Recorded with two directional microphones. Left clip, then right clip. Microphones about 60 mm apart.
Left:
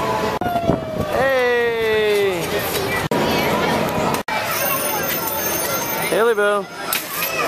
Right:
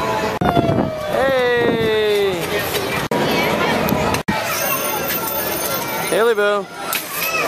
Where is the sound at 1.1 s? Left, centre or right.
Centre.